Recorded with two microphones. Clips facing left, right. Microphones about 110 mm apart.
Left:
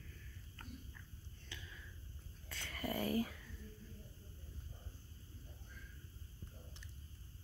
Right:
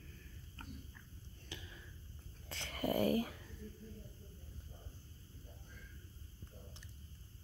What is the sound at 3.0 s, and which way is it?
Speech, 45° right (ahead or behind).